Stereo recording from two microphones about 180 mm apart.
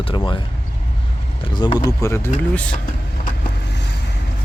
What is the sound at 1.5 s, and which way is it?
Speech, 25° left (ahead or behind).